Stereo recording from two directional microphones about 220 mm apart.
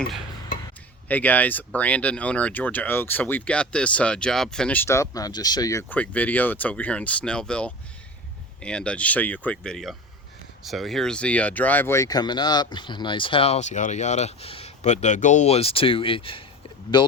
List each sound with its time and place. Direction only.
1.0 s speech: 5° left (ahead or behind)